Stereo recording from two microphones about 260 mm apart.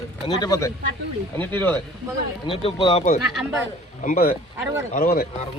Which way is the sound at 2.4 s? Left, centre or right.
Left.